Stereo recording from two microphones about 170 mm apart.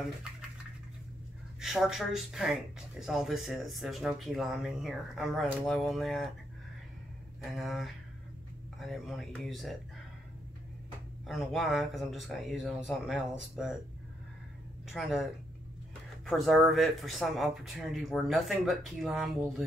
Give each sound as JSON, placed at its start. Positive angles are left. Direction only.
{"t": 1.6, "sound": "speech", "side_deg": 0}
{"t": 7.5, "sound": "speech", "side_deg": 0}
{"t": 11.2, "sound": "speech", "side_deg": 0}
{"t": 14.9, "sound": "speech", "side_deg": 0}
{"t": 16.3, "sound": "speech", "side_deg": 0}